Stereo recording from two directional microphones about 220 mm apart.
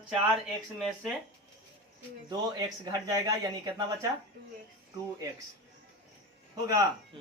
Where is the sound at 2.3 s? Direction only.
20° right (ahead or behind).